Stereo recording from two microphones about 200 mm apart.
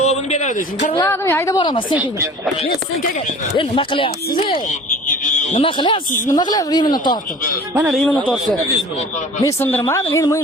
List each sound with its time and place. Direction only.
0.0 s a sound: 35° left (ahead or behind)
1.0 s a woman's voice: 15° left (ahead or behind)
2.0 s speech: 15° right (ahead or behind)
3.6 s speech: 25° left (ahead or behind)
5.0 s a sound: 40° left (ahead or behind)
5.5 s speech: 25° left (ahead or behind)
7.8 s a man's voice: 5° right (ahead or behind)
8.0 s a man's voice: 5° left (ahead or behind)
9.4 s a woman's voice: 15° left (ahead or behind)